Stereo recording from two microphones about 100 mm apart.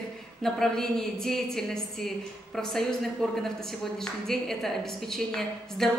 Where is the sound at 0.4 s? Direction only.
5° left (ahead or behind).